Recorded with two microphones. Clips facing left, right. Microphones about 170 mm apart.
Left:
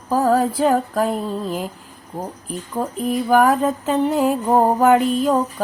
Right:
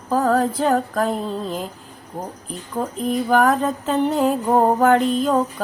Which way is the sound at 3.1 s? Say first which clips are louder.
Left 2 dB; 10° left (ahead or behind).